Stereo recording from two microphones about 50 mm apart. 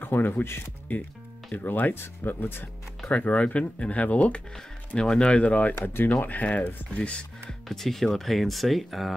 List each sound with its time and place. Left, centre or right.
0.0 s music: left
0.9 s speech: left
3.1 s speech: left
5.8 s speech: left
7.0 s speech: left
7.6 s speech: centre